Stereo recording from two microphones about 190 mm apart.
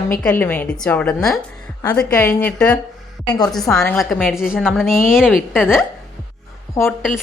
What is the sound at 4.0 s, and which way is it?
A woman's voice, 5° left (ahead or behind).